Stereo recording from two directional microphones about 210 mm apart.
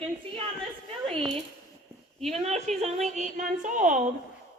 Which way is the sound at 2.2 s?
30° right (ahead or behind).